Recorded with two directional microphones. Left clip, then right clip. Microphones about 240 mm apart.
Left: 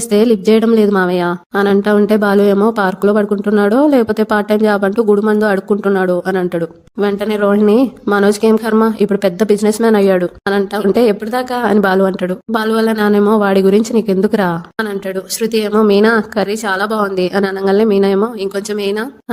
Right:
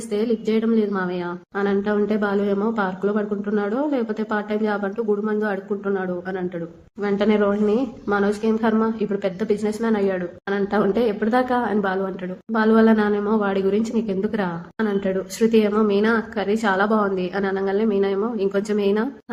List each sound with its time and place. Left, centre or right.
0.1 s speech: left